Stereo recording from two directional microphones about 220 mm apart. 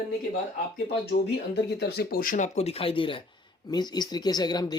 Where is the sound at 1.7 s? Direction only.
50° left (ahead or behind); by 4.7 s 20° left (ahead or behind).